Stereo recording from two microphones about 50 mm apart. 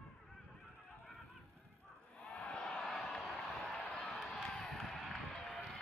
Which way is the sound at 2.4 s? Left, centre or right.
Centre.